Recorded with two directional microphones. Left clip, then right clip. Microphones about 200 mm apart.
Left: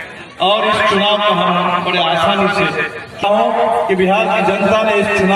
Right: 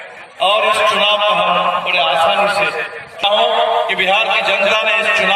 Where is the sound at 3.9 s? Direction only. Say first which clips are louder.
Left 1 dB; 30° left (ahead or behind).